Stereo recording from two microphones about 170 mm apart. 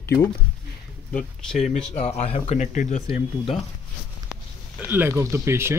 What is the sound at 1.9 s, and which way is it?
Speech, 40° left (ahead or behind).